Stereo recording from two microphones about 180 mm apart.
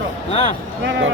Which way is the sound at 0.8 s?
90° right.